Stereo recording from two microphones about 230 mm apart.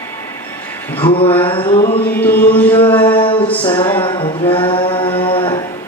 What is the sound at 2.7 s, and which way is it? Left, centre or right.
Music, left.